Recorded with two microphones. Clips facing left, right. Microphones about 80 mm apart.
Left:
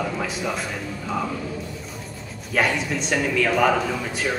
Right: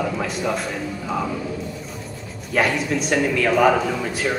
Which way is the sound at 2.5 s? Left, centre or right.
Centre.